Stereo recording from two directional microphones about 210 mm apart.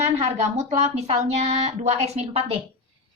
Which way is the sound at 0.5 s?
35° right (ahead or behind).